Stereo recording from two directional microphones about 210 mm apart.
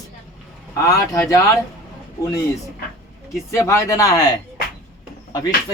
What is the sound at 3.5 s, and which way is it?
Speech, 15° left (ahead or behind).